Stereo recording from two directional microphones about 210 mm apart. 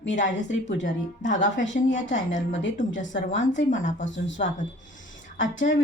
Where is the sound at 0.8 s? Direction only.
60° left (ahead or behind).